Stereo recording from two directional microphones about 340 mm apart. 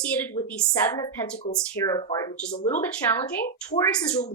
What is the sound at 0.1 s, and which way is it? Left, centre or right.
A woman's voice, centre.